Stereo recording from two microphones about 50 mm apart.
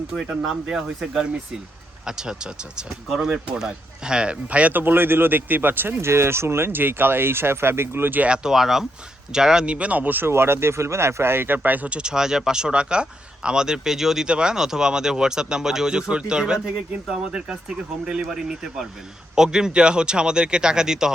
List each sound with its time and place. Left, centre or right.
0.4 s speech: centre; by 4.8 s right
4.8 s speech: right
6.0 s speech: right
6.7 s speech: right
8.4 s speech: centre
9.6 s speech: right
10.2 s speech: right
11.9 s speech: centre